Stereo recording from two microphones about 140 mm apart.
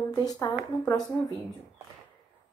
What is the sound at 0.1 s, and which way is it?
Speech, 25° left (ahead or behind).